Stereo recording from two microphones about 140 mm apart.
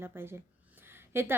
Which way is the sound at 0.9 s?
15° right (ahead or behind).